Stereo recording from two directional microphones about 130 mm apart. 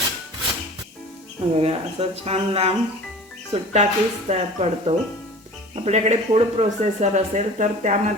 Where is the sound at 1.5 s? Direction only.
50° right (ahead or behind).